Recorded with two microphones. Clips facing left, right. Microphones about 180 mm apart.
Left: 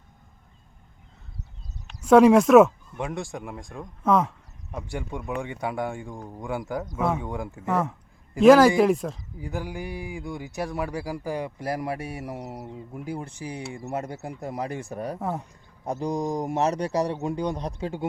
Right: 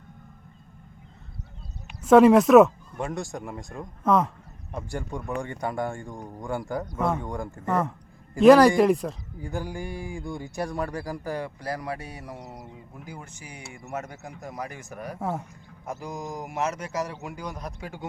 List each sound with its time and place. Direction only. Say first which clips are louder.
1.9 s a man's voice: even; centre (ahead or behind); by 15.2 s 30° left (ahead or behind)
15.2 s speech: right 4 dB; centre (ahead or behind)
15.9 s a man's voice: left 7 dB; 35° left (ahead or behind)